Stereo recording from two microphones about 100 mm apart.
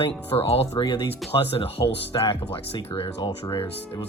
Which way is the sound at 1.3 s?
70° left (ahead or behind).